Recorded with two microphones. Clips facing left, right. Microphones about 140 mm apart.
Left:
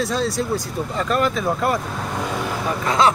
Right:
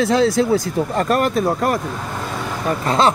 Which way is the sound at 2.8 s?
30° right (ahead or behind).